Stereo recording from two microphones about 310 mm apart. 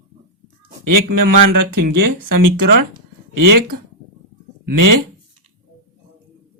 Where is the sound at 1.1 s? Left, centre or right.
Right.